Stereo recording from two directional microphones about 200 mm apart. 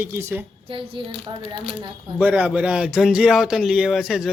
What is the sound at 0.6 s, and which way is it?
Speech, 25° right (ahead or behind).